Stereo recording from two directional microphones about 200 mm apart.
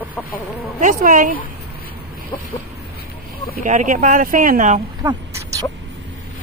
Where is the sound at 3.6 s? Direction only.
40° right (ahead or behind).